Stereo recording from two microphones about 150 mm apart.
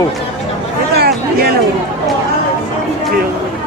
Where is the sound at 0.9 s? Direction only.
90° right.